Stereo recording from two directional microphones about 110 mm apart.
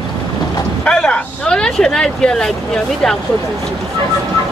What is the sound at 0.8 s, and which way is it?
Speech, 10° left (ahead or behind).